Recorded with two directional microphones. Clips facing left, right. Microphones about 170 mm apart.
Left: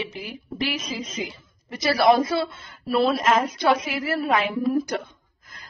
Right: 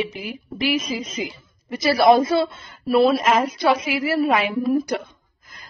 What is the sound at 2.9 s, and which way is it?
A woman's voice, 5° right (ahead or behind).